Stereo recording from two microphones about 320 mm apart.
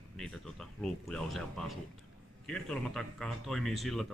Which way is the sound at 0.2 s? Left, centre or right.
Centre.